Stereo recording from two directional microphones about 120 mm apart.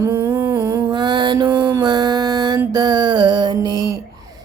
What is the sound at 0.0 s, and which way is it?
Humming, 25° right (ahead or behind).